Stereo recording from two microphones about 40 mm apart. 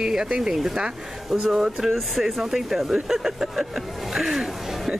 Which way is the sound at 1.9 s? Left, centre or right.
Centre.